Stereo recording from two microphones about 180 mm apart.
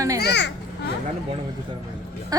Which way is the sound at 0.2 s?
70° left (ahead or behind).